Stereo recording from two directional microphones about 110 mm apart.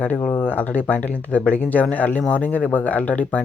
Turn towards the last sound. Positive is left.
turn(degrees=15)  # may be behind; listen again after turning